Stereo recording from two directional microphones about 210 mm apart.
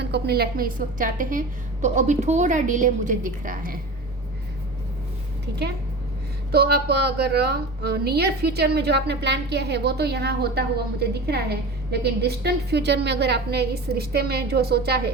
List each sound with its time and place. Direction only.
0.0 s a woman's voice: 50° right (ahead or behind)
6.5 s a woman's voice: 45° right (ahead or behind)